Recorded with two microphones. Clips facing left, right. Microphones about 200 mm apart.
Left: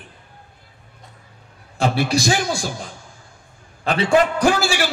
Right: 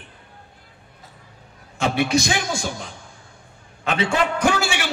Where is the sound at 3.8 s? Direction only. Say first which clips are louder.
Left 5 dB; 35° left (ahead or behind).